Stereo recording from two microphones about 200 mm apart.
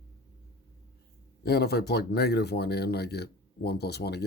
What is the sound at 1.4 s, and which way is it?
Speech, 55° left (ahead or behind).